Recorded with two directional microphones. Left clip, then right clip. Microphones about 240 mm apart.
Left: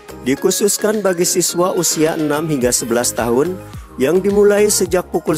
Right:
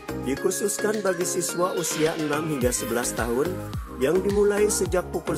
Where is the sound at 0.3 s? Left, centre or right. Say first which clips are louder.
Left 11 dB; left.